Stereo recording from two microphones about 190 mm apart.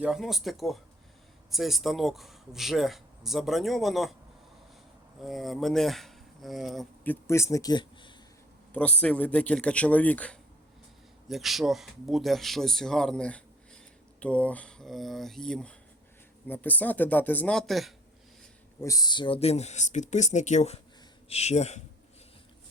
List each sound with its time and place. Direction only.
0.0 s speech: centre (ahead or behind)
5.2 s speech: centre (ahead or behind); by 8.1 s 25° left (ahead or behind)
8.7 s speech: 5° left (ahead or behind)
18.8 s speech: 20° left (ahead or behind); by 21.8 s 35° left (ahead or behind)